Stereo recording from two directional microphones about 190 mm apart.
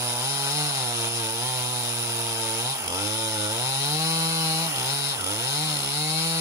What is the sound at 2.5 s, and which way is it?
Chainsaw, 15° right (ahead or behind).